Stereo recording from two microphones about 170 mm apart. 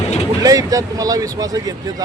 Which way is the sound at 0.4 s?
20° right (ahead or behind).